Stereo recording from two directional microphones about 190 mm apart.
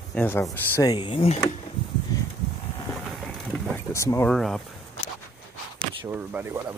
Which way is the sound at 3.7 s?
15° left (ahead or behind).